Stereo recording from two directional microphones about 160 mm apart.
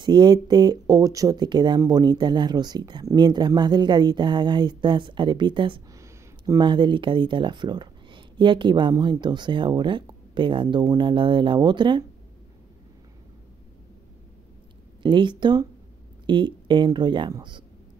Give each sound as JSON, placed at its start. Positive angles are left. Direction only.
{"t": 0.0, "sound": "speech", "side_deg": -25}
{"t": 5.9, "sound": "speech", "side_deg": -20}
{"t": 15.0, "sound": "speech", "side_deg": -30}